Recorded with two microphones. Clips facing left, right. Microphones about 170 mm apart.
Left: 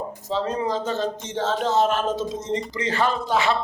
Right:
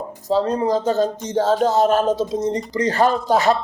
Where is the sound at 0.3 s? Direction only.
35° right (ahead or behind).